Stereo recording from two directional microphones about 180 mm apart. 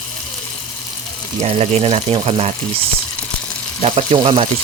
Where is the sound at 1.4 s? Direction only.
35° right (ahead or behind).